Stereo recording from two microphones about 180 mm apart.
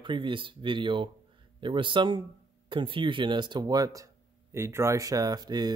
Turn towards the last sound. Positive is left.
turn(degrees=-20)  # may be behind; listen again after turning